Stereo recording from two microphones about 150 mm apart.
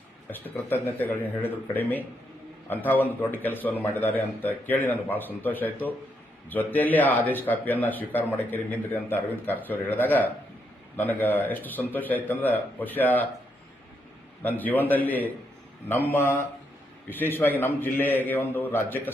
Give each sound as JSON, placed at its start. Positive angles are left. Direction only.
{"t": 0.3, "sound": "speech", "side_deg": 10}
{"t": 14.4, "sound": "speech", "side_deg": 10}